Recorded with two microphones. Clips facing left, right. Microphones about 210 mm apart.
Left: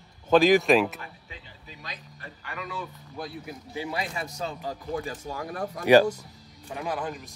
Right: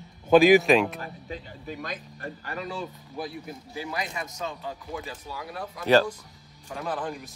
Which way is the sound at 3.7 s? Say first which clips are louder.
Left 1 dB; 25° left (ahead or behind).